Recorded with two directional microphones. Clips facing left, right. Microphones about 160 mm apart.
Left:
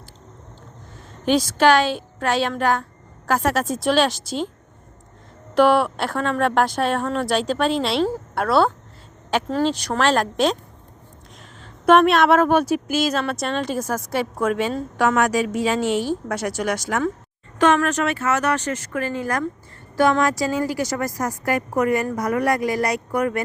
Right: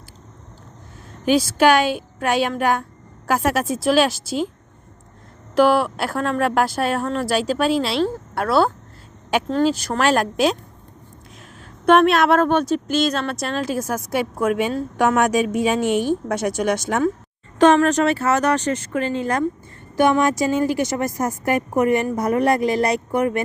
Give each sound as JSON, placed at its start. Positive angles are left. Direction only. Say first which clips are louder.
{"t": 1.2, "sound": "a woman's voice", "louder": "right 1 dB", "side_deg": -5}
{"t": 5.5, "sound": "speech", "louder": "even", "side_deg": 0}
{"t": 11.9, "sound": "a woman's voice", "louder": "even", "side_deg": 0}
{"t": 17.6, "sound": "a woman's voice", "louder": "right 4 dB", "side_deg": -35}